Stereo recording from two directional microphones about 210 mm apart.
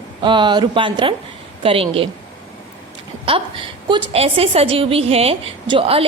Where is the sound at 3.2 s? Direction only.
25° right (ahead or behind).